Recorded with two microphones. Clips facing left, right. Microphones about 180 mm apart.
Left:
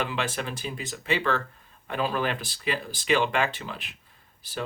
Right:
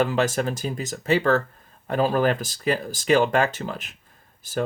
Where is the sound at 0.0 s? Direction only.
45° right (ahead or behind).